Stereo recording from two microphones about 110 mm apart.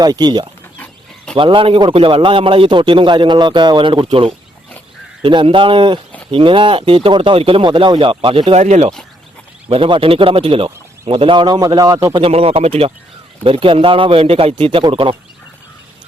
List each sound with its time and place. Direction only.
0.0 s speech: 40° right (ahead or behind)
0.8 s a sound: 10° left (ahead or behind)
1.4 s a man's voice: 50° right (ahead or behind)
8.5 s speech: 90° right
9.6 s a man's voice: 55° right (ahead or behind); by 12.2 s 35° right (ahead or behind)
12.2 s a man's voice: 60° right (ahead or behind)